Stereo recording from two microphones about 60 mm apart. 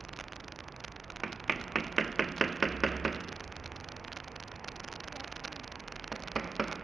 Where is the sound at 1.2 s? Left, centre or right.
Centre.